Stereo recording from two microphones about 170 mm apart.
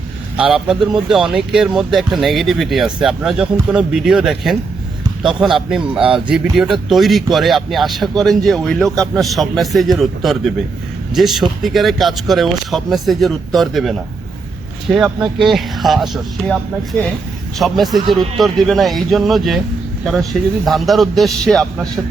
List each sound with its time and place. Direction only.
0.3 s speech: 5° right (ahead or behind)
17.6 s speech: centre (ahead or behind)
20.7 s speech: centre (ahead or behind)